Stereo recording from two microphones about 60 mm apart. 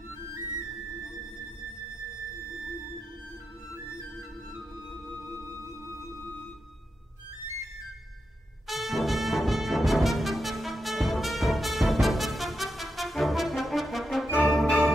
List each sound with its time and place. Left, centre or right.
4.6 s music: centre
8.6 s music: centre